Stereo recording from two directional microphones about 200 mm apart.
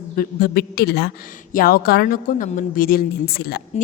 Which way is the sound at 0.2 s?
50° left (ahead or behind).